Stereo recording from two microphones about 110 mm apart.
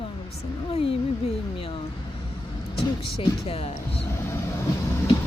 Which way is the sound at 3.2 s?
60° left (ahead or behind).